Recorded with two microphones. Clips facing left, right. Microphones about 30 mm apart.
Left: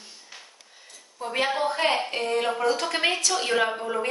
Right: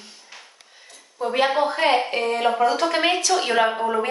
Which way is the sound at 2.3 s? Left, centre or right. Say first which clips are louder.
Right 4 dB; centre.